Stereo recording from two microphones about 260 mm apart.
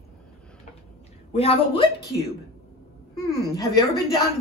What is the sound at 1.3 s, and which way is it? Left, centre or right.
Speech, left.